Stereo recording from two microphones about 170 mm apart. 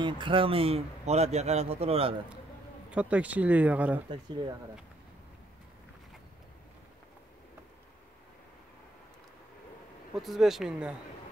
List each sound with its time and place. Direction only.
0.0 s a man's voice: 30° right (ahead or behind)
2.9 s speech: 5° right (ahead or behind)
10.2 s speech: centre (ahead or behind)